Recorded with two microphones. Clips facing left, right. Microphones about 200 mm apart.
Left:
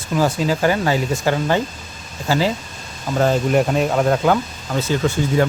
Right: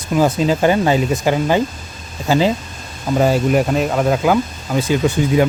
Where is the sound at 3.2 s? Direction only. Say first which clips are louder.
Right 1 dB; 5° right (ahead or behind).